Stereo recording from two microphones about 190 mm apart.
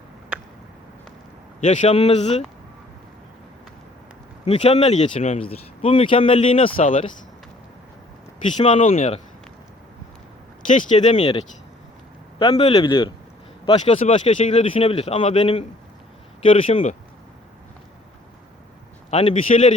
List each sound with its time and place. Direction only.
1.6 s speech: 35° left (ahead or behind)
4.4 s speech: 30° left (ahead or behind)
8.5 s speech: 25° left (ahead or behind)
10.7 s speech: 40° left (ahead or behind)
12.4 s speech: 30° left (ahead or behind)
19.1 s speech: 30° left (ahead or behind)